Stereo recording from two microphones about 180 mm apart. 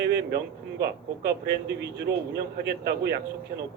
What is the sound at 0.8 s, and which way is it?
Speech, 70° right (ahead or behind).